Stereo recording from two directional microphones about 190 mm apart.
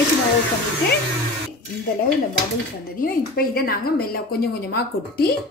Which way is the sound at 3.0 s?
50° left (ahead or behind).